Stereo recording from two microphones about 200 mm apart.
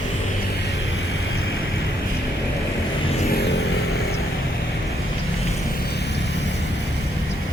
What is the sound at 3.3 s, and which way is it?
Vehicle, 55° left (ahead or behind).